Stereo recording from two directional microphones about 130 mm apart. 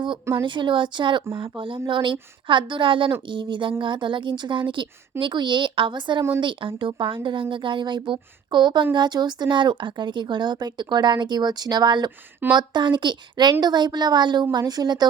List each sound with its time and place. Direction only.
0.4 s speech: 40° right (ahead or behind)